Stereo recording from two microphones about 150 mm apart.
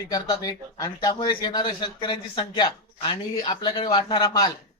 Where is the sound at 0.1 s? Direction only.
25° left (ahead or behind).